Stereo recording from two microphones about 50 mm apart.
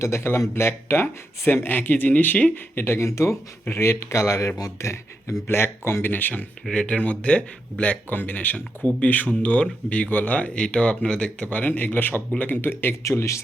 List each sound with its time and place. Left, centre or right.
0.0 s a man's voice: left
0.3 s speech: left
1.6 s speech: left
2.8 s speech: left
3.1 s speech: left
5.5 s speech: left
6.1 s speech: left
6.7 s speech: left
11.4 s speech: left
13.0 s speech: left